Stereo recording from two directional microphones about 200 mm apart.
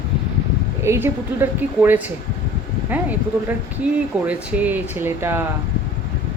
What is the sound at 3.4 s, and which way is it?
Speech, 5° right (ahead or behind).